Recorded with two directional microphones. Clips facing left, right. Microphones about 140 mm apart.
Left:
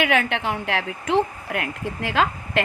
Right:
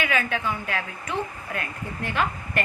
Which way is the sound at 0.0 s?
70° left (ahead or behind).